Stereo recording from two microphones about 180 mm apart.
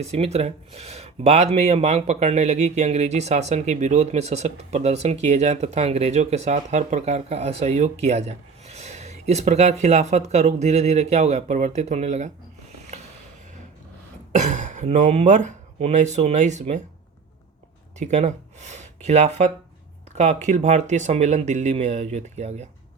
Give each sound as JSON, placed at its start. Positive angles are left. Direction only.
{"t": 0.0, "sound": "speech", "side_deg": -35}
{"t": 14.3, "sound": "speech", "side_deg": -40}
{"t": 18.0, "sound": "speech", "side_deg": -40}